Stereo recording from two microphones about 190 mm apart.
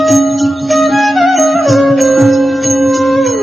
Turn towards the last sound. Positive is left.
turn(degrees=0)  # may be behind; listen again after turning